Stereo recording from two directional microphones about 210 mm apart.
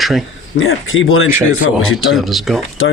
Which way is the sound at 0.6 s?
75° left (ahead or behind).